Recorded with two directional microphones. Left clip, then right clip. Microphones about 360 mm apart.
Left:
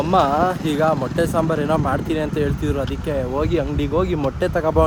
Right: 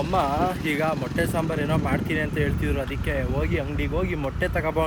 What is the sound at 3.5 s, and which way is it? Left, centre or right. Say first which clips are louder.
Speech: left 7 dB; left.